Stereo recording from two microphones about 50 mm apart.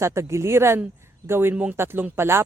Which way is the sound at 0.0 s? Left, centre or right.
Right.